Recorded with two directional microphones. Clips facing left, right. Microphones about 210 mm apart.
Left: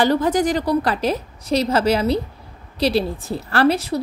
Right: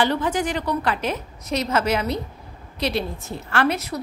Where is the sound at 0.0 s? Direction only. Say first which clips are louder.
Left 5 dB; 40° left (ahead or behind).